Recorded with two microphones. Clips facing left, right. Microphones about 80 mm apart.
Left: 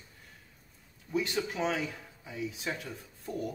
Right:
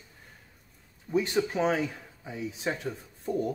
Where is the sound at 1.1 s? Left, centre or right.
Right.